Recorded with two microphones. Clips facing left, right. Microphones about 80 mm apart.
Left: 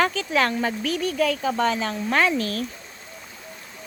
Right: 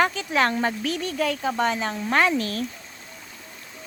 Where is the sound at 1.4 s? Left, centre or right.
Centre.